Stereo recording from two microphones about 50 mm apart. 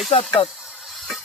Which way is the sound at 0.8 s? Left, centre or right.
Centre.